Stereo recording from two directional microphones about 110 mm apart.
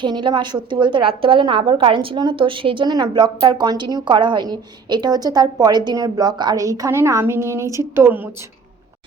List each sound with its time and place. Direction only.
0.0 s a woman's voice: 45° right (ahead or behind); by 8.3 s 20° right (ahead or behind)